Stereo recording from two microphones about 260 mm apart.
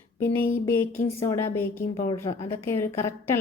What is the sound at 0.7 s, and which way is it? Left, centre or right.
A woman's voice, centre.